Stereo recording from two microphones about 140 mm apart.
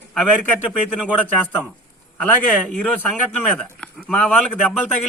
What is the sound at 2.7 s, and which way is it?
A man's voice, 5° left (ahead or behind).